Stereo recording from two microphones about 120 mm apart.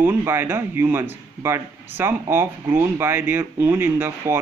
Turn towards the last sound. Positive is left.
turn(degrees=-20)  # may be behind; listen again after turning